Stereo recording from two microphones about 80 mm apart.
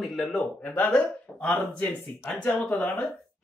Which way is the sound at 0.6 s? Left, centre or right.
Centre.